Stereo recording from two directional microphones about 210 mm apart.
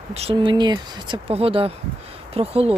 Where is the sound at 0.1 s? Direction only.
30° right (ahead or behind).